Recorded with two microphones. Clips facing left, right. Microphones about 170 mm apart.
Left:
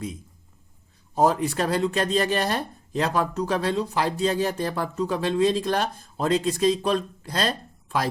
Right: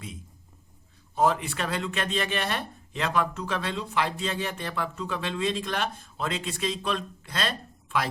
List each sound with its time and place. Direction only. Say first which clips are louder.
1.1 s speech: left 4 dB; 40° left (ahead or behind)